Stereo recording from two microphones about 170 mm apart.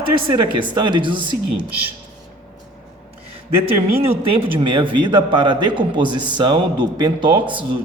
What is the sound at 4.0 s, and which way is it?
A man's voice, 35° right (ahead or behind).